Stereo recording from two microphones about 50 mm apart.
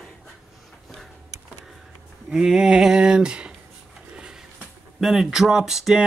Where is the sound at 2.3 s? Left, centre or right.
Centre.